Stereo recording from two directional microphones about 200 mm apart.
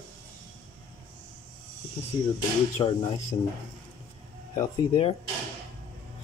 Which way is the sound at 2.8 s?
25° left (ahead or behind).